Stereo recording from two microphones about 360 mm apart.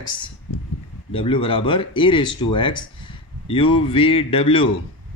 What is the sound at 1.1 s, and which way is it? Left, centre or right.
Speech, centre.